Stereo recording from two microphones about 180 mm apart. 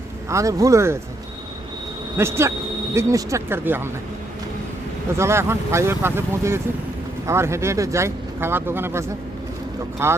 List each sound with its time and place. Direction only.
0.3 s speech: 15° right (ahead or behind)
2.1 s speech: 15° right (ahead or behind)
5.1 s speech: 15° right (ahead or behind)